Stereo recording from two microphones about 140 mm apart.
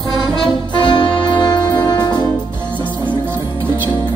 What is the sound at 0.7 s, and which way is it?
Brass instrument, 35° left (ahead or behind).